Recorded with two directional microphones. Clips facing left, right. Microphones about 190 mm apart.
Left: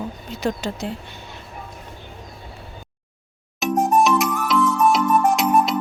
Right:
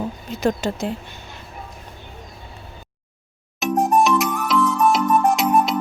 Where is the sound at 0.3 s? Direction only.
50° right (ahead or behind).